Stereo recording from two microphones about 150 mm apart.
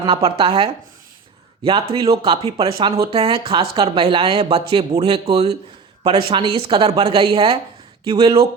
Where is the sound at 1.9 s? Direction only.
30° right (ahead or behind).